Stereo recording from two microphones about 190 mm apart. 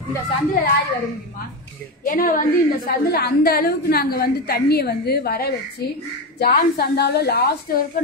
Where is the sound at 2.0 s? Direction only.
45° left (ahead or behind).